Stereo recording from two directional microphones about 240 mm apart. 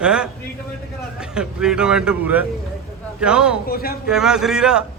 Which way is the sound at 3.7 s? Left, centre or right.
Left.